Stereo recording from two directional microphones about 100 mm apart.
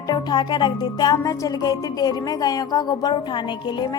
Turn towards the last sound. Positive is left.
turn(degrees=45)  # may be behind; listen again after turning